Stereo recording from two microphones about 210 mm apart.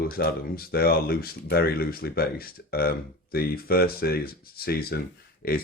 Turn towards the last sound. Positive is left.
turn(degrees=45)  # may be behind; listen again after turning